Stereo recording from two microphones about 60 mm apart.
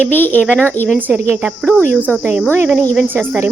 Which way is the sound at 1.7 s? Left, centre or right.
Left.